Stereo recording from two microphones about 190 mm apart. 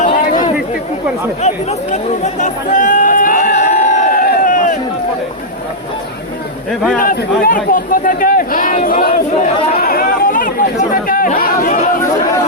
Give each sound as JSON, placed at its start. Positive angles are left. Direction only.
{"t": 0.0, "sound": "chatter", "side_deg": 45}
{"t": 7.0, "sound": "speech", "side_deg": 45}